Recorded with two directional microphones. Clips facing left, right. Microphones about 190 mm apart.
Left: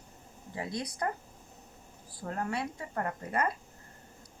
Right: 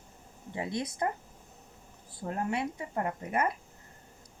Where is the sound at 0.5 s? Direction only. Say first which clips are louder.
Right 2 dB; 25° right (ahead or behind).